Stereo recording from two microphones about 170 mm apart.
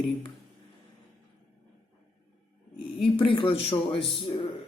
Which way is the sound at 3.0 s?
30° left (ahead or behind).